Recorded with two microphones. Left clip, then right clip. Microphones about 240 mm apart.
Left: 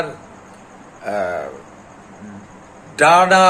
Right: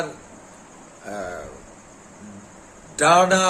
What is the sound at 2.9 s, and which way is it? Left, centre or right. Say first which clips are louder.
Speech: left 5 dB; centre.